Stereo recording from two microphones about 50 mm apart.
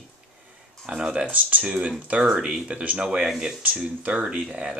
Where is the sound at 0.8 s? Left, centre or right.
Centre.